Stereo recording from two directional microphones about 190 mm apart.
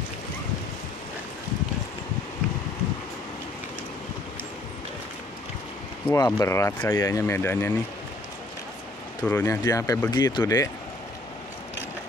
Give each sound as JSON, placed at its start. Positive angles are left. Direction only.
{"t": 6.0, "sound": "speech", "side_deg": 15}
{"t": 9.2, "sound": "speech", "side_deg": 10}